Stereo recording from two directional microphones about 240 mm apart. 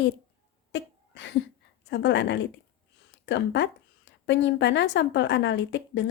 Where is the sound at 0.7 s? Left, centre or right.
Left.